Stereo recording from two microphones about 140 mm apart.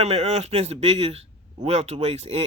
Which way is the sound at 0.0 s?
50° right (ahead or behind).